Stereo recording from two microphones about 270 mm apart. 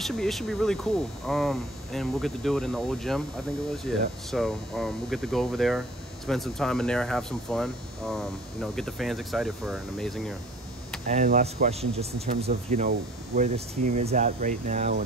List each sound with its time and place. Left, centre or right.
0.0 s speech: centre
11.1 s speech: right